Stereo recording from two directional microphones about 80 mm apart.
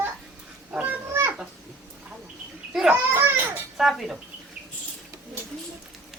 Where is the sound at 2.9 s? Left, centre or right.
Right.